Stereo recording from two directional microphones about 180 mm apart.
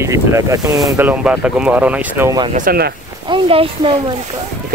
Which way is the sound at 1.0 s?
10° right (ahead or behind).